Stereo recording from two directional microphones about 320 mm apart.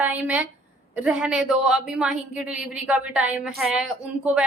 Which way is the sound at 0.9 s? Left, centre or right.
Centre.